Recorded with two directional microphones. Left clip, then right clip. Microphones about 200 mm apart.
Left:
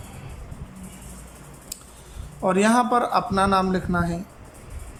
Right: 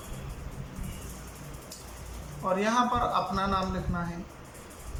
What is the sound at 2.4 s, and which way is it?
A man's voice, 45° left (ahead or behind).